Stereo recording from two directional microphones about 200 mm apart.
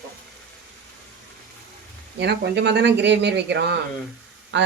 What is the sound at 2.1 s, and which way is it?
Speech, 55° right (ahead or behind).